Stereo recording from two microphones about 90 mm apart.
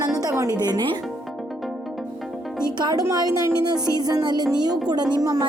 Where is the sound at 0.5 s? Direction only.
50° right (ahead or behind).